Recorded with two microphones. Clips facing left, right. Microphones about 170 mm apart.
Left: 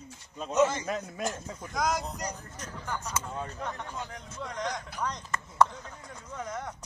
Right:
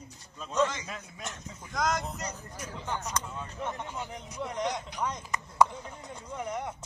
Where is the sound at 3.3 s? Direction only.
30° left (ahead or behind).